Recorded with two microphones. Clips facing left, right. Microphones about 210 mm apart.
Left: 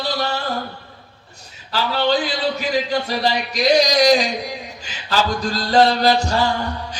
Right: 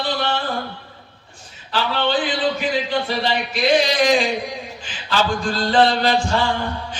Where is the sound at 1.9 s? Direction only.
40° left (ahead or behind).